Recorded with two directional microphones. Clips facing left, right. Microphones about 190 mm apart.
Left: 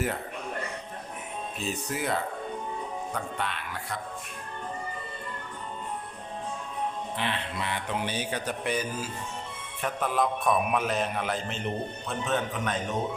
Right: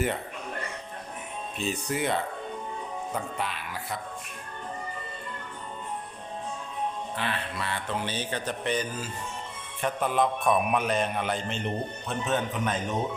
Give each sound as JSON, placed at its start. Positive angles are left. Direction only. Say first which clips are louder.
{"t": 1.5, "sound": "a man's voice", "louder": "right 3 dB", "side_deg": 0}
{"t": 3.3, "sound": "a man's voice", "louder": "even", "side_deg": 0}
{"t": 7.2, "sound": "a man's voice", "louder": "left 1 dB", "side_deg": 20}